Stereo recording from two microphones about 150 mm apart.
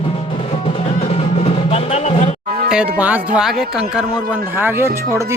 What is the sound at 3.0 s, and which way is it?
Speech, 5° right (ahead or behind).